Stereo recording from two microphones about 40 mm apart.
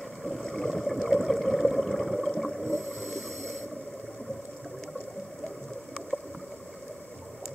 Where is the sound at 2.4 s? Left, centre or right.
Centre.